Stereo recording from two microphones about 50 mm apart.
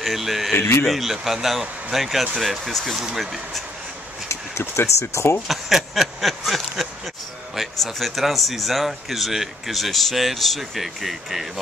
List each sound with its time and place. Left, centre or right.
0.0 s speech: centre
0.6 s speech: left
0.8 s speech: centre
4.3 s speech: left
5.5 s speech: centre